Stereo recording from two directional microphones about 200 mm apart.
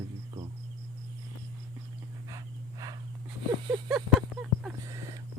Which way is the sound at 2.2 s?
20° right (ahead or behind).